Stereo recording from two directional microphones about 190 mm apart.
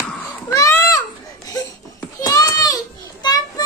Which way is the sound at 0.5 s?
15° left (ahead or behind).